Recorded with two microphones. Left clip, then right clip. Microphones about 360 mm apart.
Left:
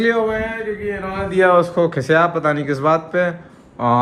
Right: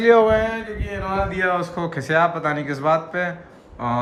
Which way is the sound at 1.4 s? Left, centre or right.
Centre.